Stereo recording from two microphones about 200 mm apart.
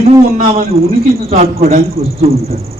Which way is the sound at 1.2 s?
35° right (ahead or behind).